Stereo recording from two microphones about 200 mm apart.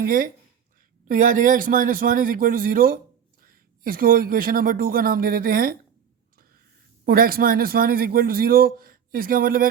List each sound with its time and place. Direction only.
0.0 s a man's voice: 45° right (ahead or behind)
7.0 s a man's voice: 45° right (ahead or behind)